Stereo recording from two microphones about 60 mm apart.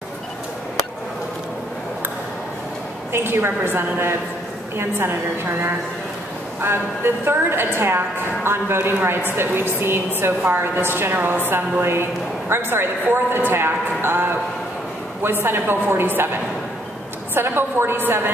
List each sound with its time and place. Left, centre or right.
3.1 s a woman's voice: right
7.2 s a woman's voice: right